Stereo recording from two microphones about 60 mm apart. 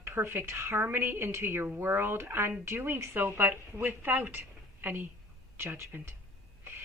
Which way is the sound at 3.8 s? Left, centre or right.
Right.